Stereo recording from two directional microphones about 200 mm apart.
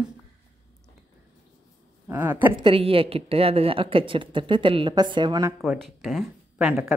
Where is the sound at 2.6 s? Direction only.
25° right (ahead or behind).